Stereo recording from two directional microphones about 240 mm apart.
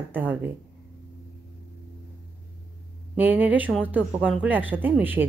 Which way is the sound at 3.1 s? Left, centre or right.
Centre.